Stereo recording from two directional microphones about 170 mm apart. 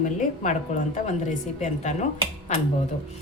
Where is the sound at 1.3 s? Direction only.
45° left (ahead or behind).